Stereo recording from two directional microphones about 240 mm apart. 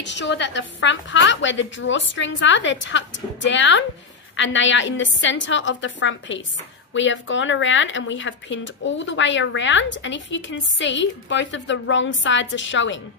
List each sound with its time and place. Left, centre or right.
0.0 s a woman's voice: left